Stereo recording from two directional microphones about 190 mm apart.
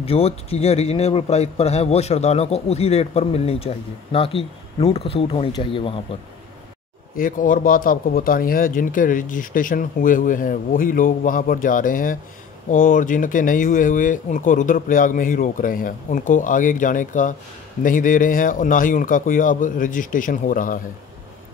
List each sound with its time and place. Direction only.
0.0 s a man's voice: 30° left (ahead or behind)
7.2 s speech: 45° left (ahead or behind)